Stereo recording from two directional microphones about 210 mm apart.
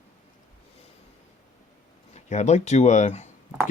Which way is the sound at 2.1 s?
35° left (ahead or behind).